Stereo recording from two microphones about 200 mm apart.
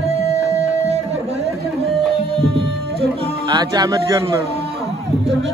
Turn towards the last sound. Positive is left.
turn(degrees=-20)  # may be behind; listen again after turning